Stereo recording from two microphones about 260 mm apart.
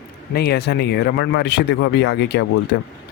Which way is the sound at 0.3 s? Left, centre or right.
Left.